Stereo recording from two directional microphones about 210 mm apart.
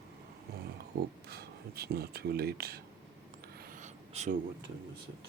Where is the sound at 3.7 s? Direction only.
35° right (ahead or behind).